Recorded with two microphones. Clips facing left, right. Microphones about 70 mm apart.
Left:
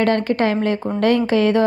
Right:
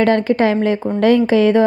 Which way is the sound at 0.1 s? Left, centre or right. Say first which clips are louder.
Right 3 dB; left.